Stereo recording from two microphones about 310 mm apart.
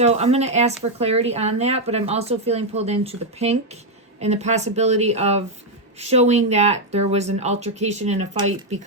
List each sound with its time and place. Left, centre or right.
0.0 s speech: right